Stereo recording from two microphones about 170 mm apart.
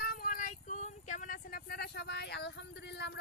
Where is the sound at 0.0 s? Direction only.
60° left (ahead or behind).